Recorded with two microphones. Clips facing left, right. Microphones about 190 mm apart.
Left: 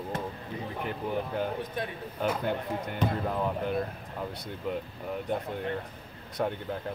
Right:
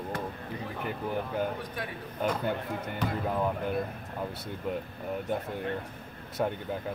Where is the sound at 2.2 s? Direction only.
5° left (ahead or behind).